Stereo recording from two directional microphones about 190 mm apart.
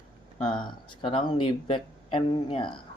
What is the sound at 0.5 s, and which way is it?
Speech, 25° left (ahead or behind).